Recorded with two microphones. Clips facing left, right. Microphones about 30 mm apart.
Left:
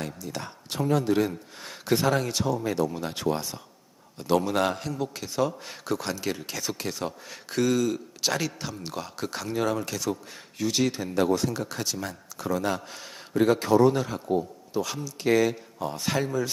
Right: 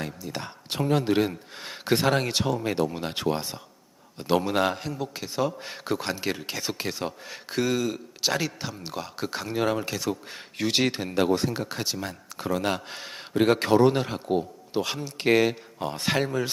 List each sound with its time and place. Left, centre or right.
0.0 s speech: centre
0.7 s a man's voice: right
2.7 s a man's voice: right
10.2 s a man's voice: right
11.2 s speech: right
12.4 s speech: right
13.4 s a man's voice: right